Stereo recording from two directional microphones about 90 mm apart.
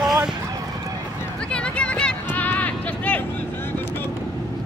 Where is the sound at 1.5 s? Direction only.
10° left (ahead or behind).